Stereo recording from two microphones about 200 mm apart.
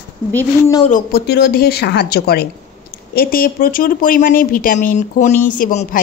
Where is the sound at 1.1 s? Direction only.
50° left (ahead or behind).